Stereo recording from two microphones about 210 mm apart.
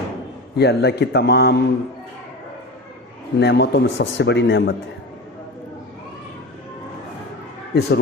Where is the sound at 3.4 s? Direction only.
50° left (ahead or behind).